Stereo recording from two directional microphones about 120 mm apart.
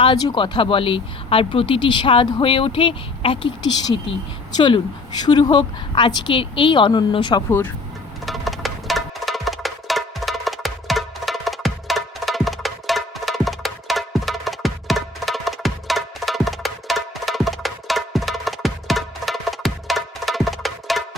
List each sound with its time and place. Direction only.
0.0 s a woman's voice: 40° left (ahead or behind)
8.3 s music: centre (ahead or behind)